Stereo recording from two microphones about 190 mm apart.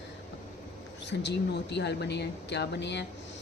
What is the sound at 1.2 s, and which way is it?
A woman's voice, 65° left (ahead or behind).